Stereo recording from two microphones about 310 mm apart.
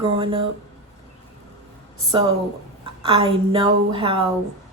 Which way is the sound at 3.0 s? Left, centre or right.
Centre.